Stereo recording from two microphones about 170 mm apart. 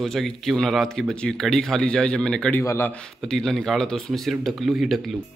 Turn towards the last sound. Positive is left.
turn(degrees=0)  # may be behind; listen again after turning